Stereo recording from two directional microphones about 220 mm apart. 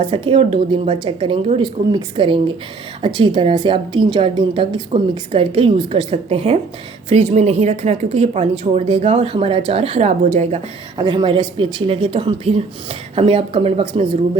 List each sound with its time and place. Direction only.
0.0 s speech: 25° right (ahead or behind)